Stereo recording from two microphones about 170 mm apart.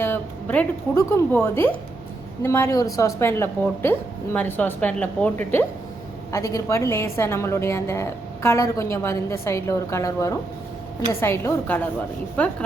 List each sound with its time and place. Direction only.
0.0 s a woman's voice: 10° left (ahead or behind)